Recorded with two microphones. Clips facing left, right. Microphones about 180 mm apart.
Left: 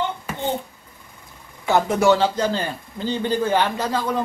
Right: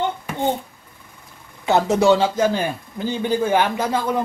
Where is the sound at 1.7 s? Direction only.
20° right (ahead or behind).